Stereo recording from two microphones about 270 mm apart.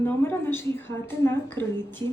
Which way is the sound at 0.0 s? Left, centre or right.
Centre.